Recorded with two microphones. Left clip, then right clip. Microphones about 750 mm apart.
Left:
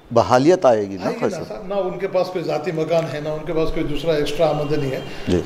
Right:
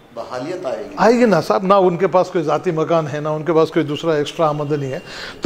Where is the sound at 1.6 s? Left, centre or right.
Right.